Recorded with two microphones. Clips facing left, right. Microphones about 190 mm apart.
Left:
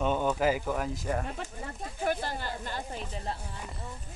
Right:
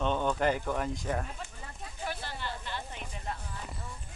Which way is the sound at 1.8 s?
45° left (ahead or behind).